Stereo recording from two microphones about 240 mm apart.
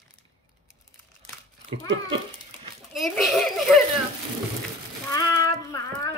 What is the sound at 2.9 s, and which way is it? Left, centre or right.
Speech, centre.